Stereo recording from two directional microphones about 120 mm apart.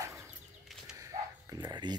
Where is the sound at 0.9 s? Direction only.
30° right (ahead or behind).